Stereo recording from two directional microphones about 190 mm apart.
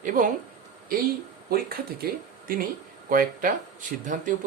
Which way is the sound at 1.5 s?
50° right (ahead or behind).